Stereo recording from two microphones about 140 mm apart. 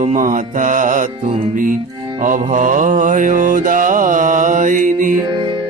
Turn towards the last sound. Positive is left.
turn(degrees=-70)  # may be behind; listen again after turning